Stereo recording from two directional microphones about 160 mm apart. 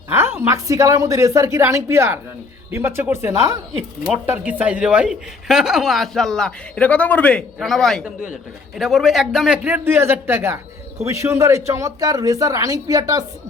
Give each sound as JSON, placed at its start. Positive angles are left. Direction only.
{"t": 0.1, "sound": "a woman's voice", "side_deg": -15}